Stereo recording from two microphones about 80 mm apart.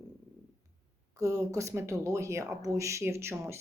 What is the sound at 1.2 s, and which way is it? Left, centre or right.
Speech, right.